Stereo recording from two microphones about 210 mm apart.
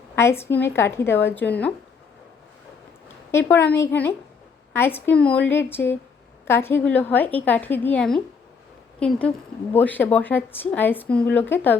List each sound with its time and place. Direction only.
0.2 s a woman's voice: 10° left (ahead or behind)
3.3 s a woman's voice: 10° left (ahead or behind)